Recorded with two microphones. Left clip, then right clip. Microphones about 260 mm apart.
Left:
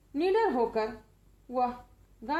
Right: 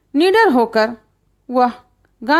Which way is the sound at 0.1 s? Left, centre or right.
Right.